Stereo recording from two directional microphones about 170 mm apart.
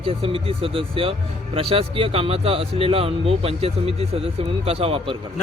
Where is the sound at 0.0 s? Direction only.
35° right (ahead or behind).